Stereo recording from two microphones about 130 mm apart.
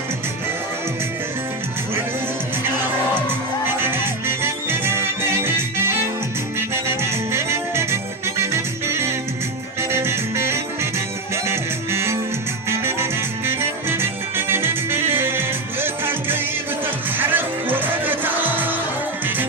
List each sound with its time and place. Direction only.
3.8 s music: 15° right (ahead or behind)
7.3 s music: 20° right (ahead or behind)